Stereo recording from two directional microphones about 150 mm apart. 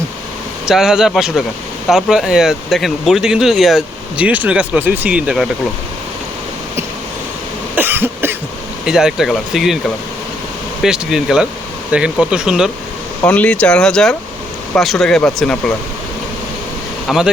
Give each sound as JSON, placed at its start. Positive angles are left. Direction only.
{"t": 0.6, "sound": "speech", "side_deg": -5}
{"t": 7.8, "sound": "cough", "side_deg": -15}
{"t": 8.9, "sound": "speech", "side_deg": -5}
{"t": 10.8, "sound": "speech", "side_deg": -5}
{"t": 13.2, "sound": "speech", "side_deg": 10}
{"t": 17.1, "sound": "speech", "side_deg": -5}